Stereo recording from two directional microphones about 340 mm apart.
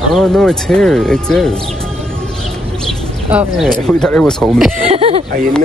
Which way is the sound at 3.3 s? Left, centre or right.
Centre.